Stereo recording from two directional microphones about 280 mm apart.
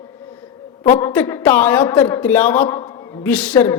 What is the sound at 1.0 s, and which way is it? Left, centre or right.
A woman's voice, centre.